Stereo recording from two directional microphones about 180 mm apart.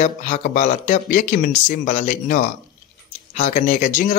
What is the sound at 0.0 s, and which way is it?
Speech, 40° left (ahead or behind).